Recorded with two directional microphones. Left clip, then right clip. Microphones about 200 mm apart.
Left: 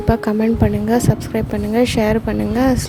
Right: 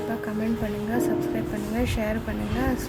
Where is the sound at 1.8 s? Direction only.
45° left (ahead or behind).